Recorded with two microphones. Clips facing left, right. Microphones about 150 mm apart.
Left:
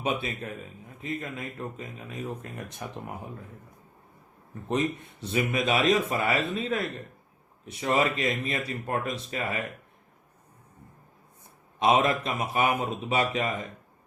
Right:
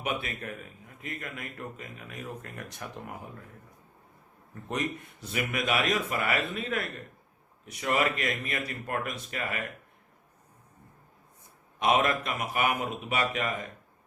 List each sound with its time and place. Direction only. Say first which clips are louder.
1.0 s speech: left 5 dB; 25° left (ahead or behind)
4.7 s speech: left 5 dB; 25° left (ahead or behind)
11.8 s speech: left 3 dB; 25° left (ahead or behind)